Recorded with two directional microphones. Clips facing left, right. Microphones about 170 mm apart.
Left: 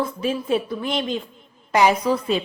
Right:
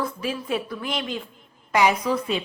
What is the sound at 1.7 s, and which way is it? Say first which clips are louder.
Speech: left 3 dB; 35° left (ahead or behind).